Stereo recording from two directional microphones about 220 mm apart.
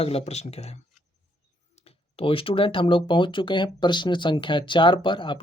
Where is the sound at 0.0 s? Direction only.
25° left (ahead or behind).